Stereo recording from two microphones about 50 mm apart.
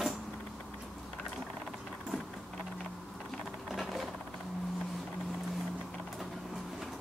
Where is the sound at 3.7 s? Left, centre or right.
Centre.